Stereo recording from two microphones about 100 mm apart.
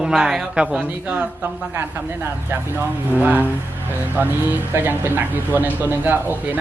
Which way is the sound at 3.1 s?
15° right (ahead or behind).